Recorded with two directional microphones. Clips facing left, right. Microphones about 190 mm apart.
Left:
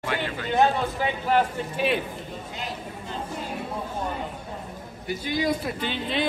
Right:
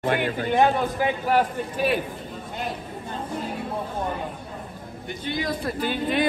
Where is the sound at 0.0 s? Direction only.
50° right (ahead or behind).